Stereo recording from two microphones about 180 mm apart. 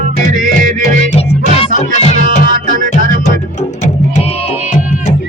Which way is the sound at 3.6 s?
40° left (ahead or behind).